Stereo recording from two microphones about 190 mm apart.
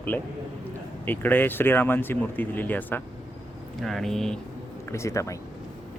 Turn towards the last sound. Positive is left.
turn(degrees=15)  # may be behind; listen again after turning